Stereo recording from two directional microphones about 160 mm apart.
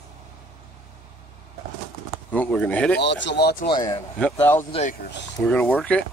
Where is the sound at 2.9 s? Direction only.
90° left.